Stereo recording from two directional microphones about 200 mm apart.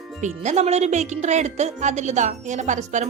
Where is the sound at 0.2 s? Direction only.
35° right (ahead or behind).